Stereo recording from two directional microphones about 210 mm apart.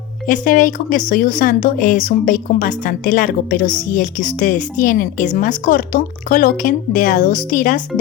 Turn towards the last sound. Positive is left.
turn(degrees=40)  # may be behind; listen again after turning